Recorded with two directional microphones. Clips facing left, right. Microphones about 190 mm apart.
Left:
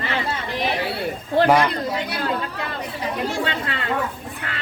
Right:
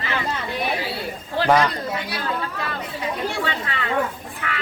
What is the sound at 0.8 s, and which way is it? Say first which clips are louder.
Chatter: left 3 dB; 60° left (ahead or behind).